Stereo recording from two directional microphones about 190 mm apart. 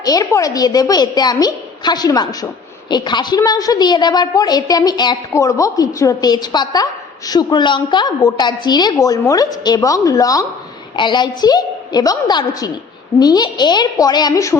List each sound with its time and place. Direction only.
0.0 s a woman's voice: 20° left (ahead or behind)